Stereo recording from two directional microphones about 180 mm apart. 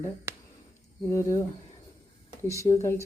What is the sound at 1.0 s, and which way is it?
Speech, 15° left (ahead or behind).